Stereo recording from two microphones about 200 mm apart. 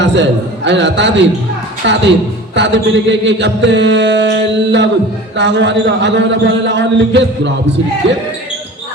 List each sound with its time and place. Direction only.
0.0 s a man's voice: 60° right (ahead or behind)
2.6 s mantra: 60° right (ahead or behind)
5.4 s a man's voice: 60° right (ahead or behind)